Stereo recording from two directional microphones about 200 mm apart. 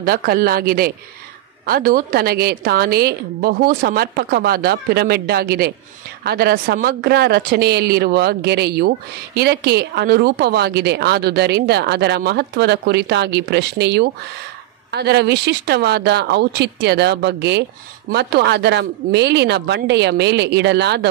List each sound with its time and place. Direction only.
0.0 s a woman's voice: 45° right (ahead or behind)